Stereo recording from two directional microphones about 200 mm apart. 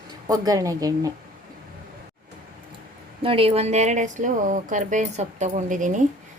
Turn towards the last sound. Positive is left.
turn(degrees=-40)  # may be behind; listen again after turning